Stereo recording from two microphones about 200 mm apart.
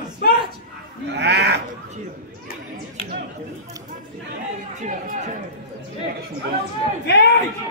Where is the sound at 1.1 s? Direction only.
60° right (ahead or behind).